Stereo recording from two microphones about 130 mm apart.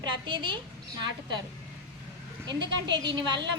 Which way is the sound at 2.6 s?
35° right (ahead or behind).